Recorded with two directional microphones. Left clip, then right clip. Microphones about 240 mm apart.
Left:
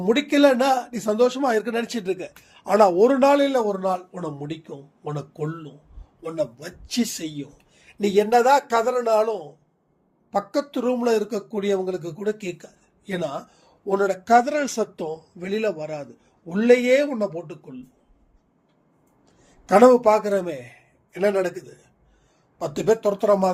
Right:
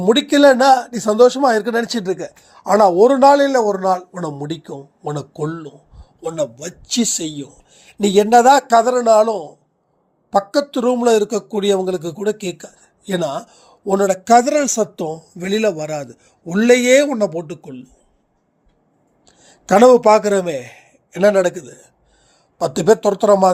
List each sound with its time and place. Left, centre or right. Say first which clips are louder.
0.0 s a man's voice: right 6 dB; right
19.2 s speech: right 10 dB; right